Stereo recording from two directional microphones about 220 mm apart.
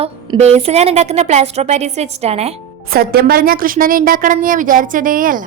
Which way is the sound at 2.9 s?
45° right (ahead or behind).